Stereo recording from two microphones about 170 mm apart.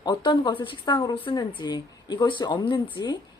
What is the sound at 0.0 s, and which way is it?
Speech, 25° left (ahead or behind).